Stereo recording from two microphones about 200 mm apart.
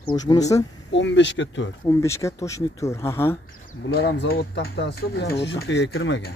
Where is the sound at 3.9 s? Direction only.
60° left (ahead or behind).